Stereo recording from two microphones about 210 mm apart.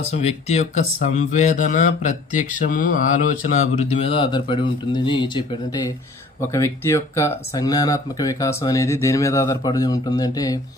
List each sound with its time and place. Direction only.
0.2 s speech: 30° left (ahead or behind)